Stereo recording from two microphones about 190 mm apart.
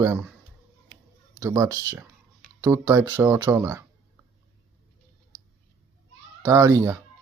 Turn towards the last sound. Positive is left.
turn(degrees=-15)  # may be behind; listen again after turning